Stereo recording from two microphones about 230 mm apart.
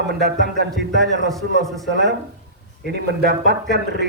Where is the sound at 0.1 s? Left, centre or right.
Right.